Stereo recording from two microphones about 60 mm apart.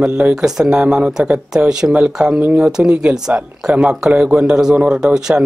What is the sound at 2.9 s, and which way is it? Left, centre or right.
Speech, centre.